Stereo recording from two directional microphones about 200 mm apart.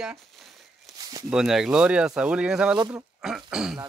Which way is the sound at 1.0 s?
20° right (ahead or behind).